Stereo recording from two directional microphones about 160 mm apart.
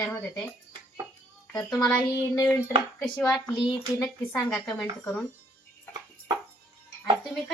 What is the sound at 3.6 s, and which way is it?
Speech, centre (ahead or behind).